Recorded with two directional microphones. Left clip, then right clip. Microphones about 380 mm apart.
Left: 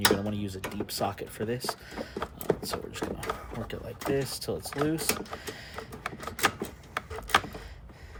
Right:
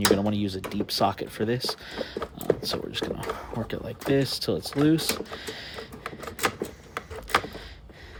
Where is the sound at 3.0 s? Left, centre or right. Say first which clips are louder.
Right 5 dB; right.